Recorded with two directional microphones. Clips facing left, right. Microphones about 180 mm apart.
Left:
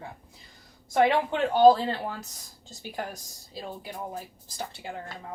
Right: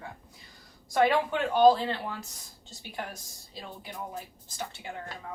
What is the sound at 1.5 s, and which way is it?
Speech, 35° left (ahead or behind).